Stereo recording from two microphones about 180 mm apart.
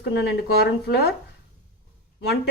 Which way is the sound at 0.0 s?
70° left (ahead or behind).